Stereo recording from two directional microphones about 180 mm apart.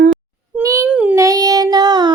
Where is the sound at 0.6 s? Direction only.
15° right (ahead or behind).